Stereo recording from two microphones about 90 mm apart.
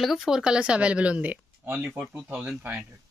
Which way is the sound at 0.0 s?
Centre (ahead or behind).